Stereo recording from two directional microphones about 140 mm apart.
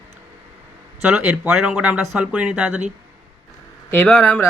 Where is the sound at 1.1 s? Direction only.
5° right (ahead or behind).